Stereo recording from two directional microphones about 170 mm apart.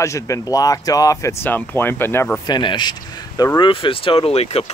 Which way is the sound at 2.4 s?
25° left (ahead or behind).